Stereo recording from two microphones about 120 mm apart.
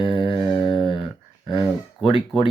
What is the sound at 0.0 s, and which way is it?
Humming, 45° left (ahead or behind).